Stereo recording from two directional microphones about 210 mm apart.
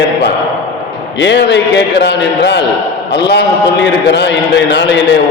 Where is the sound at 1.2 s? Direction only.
55° left (ahead or behind).